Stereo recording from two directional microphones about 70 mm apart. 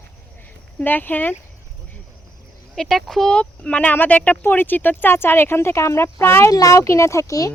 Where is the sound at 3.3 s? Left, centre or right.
Centre; by 6.5 s left.